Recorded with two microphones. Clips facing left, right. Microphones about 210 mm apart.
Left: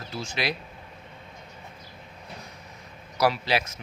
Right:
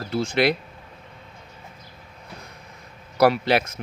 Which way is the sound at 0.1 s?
60° right (ahead or behind).